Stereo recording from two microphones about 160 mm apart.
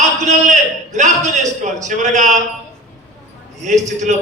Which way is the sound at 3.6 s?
50° right (ahead or behind).